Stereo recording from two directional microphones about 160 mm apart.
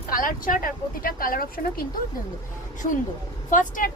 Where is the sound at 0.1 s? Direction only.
60° left (ahead or behind).